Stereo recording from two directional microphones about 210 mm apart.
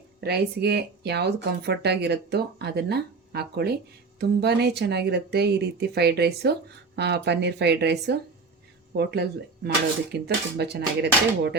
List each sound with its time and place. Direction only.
0.2 s speech: 50° right (ahead or behind)